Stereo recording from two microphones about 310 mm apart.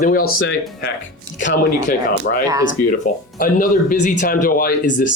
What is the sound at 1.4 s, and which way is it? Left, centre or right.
Speech, left.